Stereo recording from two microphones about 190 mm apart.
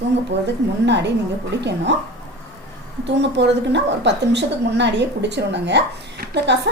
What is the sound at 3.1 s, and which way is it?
A woman's voice, 65° right (ahead or behind).